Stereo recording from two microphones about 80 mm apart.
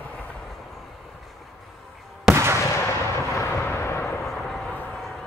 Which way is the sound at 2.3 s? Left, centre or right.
Right.